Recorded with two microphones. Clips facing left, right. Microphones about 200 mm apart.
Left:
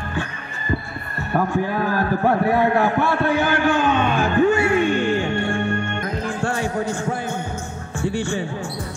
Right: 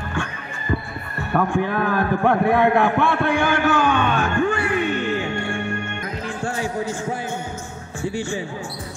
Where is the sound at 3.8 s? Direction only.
25° left (ahead or behind).